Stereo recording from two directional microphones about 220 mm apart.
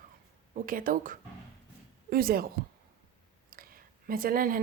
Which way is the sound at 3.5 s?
40° right (ahead or behind).